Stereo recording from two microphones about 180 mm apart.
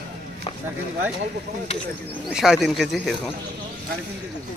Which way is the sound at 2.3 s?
Centre (ahead or behind).